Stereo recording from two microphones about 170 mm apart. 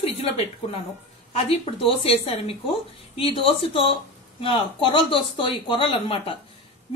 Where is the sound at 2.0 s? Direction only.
35° left (ahead or behind).